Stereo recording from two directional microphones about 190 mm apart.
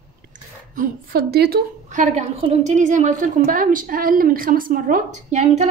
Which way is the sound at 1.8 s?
40° right (ahead or behind).